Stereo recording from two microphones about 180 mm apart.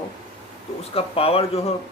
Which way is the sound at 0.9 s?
30° left (ahead or behind).